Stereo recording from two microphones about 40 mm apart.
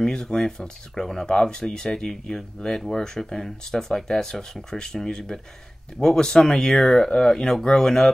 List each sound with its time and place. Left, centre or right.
0.0 s speech: centre